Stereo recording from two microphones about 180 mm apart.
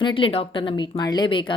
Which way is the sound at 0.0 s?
30° left (ahead or behind).